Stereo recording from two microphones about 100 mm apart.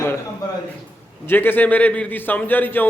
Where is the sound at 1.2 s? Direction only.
20° left (ahead or behind).